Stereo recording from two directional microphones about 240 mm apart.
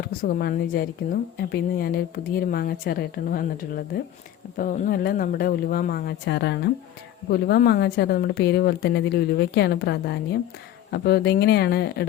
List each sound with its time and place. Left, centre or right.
0.2 s speech: left